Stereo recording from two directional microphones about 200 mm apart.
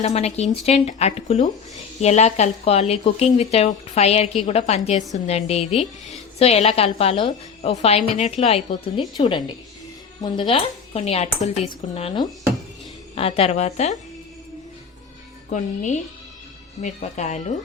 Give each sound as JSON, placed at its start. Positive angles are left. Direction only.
{"t": 0.0, "sound": "a woman's voice", "side_deg": 30}
{"t": 15.5, "sound": "speech", "side_deg": 40}